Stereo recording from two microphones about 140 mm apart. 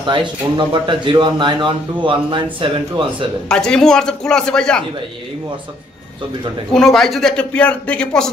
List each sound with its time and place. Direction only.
0.0 s speech: 35° right (ahead or behind)
3.4 s a man's voice: 5° left (ahead or behind)
6.7 s a man's voice: 5° left (ahead or behind)